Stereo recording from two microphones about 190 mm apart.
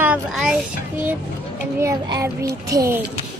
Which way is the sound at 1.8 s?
15° right (ahead or behind).